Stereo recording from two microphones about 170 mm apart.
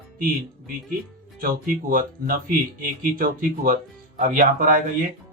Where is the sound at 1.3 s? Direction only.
55° right (ahead or behind).